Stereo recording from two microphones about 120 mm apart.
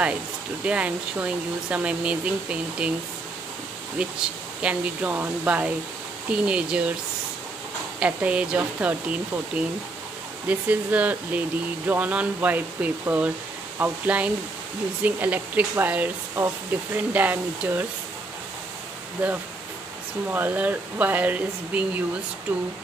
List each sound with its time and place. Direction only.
0.7 s speech: 10° right (ahead or behind)
4.0 s speech: 10° right (ahead or behind)
8.0 s speech: 10° right (ahead or behind)
20.2 s speech: 15° right (ahead or behind)